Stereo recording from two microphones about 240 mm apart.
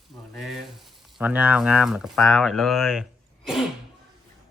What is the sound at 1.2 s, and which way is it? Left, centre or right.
Speech, centre.